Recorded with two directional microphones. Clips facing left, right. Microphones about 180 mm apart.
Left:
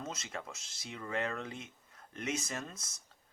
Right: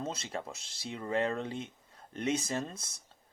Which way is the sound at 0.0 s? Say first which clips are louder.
Right 5 dB; 30° right (ahead or behind).